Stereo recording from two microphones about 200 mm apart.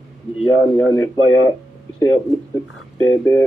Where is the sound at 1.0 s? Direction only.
90° left.